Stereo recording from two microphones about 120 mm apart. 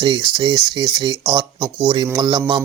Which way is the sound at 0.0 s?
40° right (ahead or behind).